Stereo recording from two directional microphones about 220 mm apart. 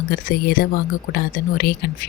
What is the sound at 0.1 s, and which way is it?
Speech, 40° left (ahead or behind).